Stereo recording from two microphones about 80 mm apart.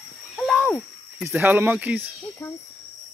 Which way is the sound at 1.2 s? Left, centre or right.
Right.